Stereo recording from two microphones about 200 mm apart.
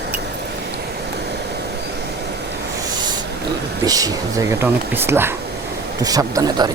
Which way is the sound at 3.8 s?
20° right (ahead or behind).